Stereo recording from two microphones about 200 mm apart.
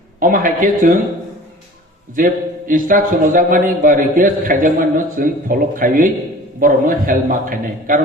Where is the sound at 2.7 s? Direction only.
45° right (ahead or behind).